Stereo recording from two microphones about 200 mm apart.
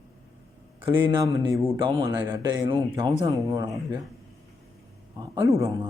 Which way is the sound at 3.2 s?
15° right (ahead or behind).